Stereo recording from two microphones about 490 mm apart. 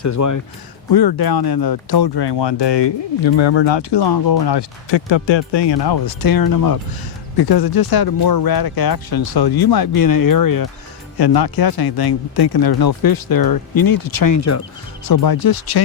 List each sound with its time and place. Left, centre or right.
0.0 s speech: left
0.9 s speech: left
15.0 s speech: left